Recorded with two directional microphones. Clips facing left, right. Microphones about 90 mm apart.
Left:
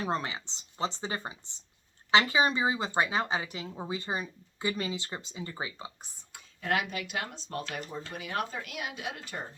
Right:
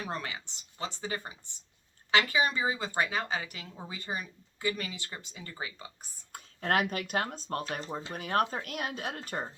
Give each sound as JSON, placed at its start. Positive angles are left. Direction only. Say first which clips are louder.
{"t": 0.0, "sound": "speech", "louder": "left 5 dB", "side_deg": 25}
{"t": 6.3, "sound": "speech", "louder": "right 2 dB", "side_deg": -45}
{"t": 8.1, "sound": "speech", "louder": "right 5 dB", "side_deg": -45}